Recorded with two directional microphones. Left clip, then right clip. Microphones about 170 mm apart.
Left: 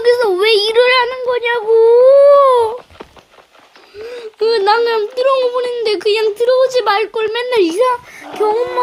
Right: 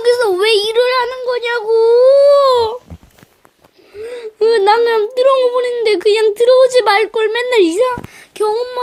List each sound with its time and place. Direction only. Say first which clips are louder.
0.0 s a sound: even; 5° left (ahead or behind)
4.0 s whimper: right 2 dB; 20° right (ahead or behind)
8.4 s female singing: left 2 dB; 10° left (ahead or behind)